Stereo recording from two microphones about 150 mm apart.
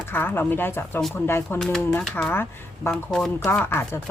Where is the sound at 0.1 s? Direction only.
15° left (ahead or behind).